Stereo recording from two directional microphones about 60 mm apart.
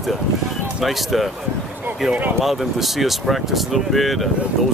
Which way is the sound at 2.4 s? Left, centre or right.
Centre.